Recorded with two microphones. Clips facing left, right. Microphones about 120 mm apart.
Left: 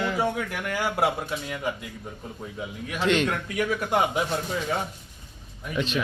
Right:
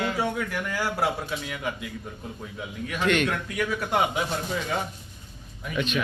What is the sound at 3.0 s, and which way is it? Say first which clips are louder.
Speech: left 1 dB; 25° left (ahead or behind).